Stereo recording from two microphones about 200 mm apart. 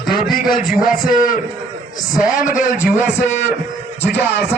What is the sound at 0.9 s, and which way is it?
A man's voice, 45° left (ahead or behind).